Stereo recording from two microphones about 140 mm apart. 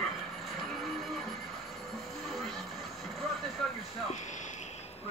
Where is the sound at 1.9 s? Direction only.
Centre (ahead or behind).